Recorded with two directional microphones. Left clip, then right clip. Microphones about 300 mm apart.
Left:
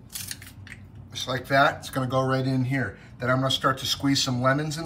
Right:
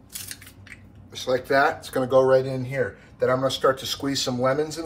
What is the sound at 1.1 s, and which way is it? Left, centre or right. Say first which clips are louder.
Speech: right 3 dB; centre.